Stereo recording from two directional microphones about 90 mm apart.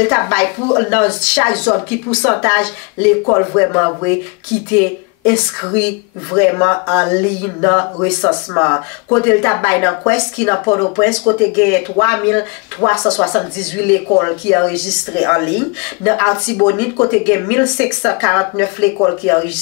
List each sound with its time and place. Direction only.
0.0 s speech: 20° left (ahead or behind)